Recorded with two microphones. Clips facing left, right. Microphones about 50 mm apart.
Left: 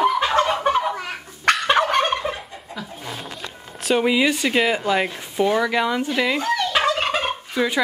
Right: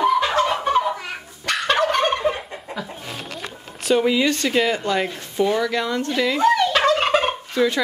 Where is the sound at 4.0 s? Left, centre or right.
Centre.